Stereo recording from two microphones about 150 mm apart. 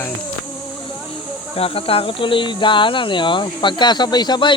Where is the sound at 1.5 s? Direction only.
40° left (ahead or behind).